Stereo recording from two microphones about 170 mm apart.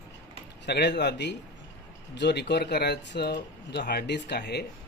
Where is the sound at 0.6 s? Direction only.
80° left.